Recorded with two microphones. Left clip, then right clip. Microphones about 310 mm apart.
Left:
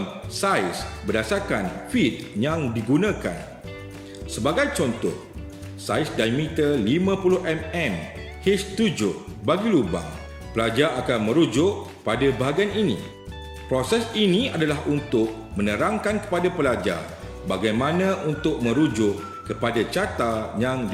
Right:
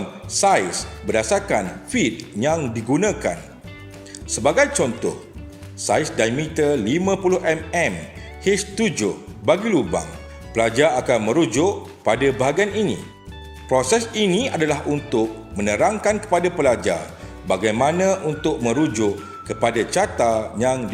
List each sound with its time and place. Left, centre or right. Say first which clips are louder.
0.3 s speech: right 5 dB; centre